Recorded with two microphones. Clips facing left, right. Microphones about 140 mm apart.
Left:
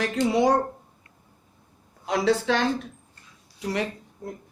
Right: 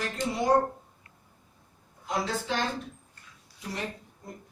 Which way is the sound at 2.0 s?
80° left.